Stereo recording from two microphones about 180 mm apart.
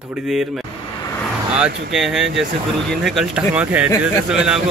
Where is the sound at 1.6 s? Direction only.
5° right (ahead or behind).